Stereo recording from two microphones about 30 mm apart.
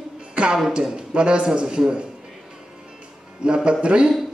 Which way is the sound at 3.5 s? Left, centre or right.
Right.